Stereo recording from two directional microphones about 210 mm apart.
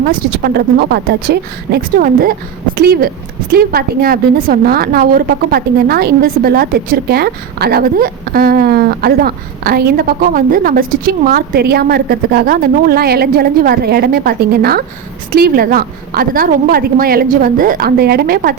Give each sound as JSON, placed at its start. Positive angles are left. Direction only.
{"t": 0.1, "sound": "a woman's voice", "side_deg": -45}